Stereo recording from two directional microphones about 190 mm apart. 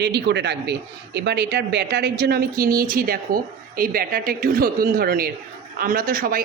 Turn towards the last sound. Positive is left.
turn(degrees=-50)  # may be behind; listen again after turning